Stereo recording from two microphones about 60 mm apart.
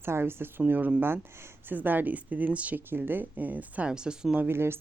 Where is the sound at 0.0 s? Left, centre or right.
Right.